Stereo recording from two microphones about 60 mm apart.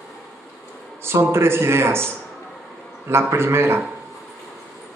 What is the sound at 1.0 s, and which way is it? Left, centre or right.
A man's voice, right.